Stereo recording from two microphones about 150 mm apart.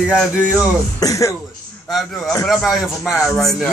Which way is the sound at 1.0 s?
20° left (ahead or behind).